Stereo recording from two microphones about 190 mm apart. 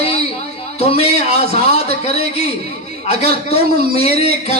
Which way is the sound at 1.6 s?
35° left (ahead or behind).